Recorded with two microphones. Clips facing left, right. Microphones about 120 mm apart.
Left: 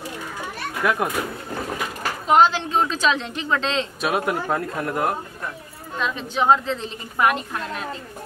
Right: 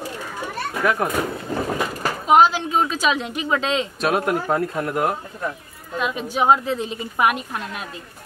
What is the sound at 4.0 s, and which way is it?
A woman's voice, centre (ahead or behind).